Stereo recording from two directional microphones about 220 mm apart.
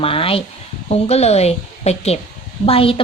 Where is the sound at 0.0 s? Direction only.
25° left (ahead or behind).